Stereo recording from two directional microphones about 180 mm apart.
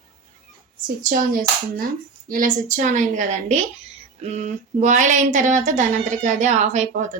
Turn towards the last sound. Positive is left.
turn(degrees=-40)  # may be behind; listen again after turning